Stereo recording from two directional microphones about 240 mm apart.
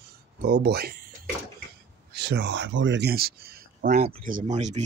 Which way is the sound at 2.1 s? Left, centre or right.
Right.